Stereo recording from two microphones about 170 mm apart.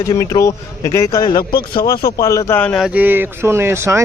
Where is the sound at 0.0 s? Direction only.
20° left (ahead or behind).